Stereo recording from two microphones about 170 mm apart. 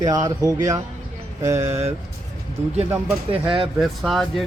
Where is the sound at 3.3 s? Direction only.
30° right (ahead or behind).